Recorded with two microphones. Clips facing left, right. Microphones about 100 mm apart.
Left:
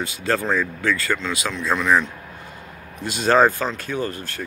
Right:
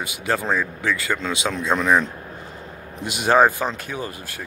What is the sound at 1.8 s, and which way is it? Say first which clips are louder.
Speech: even; 35° right (ahead or behind).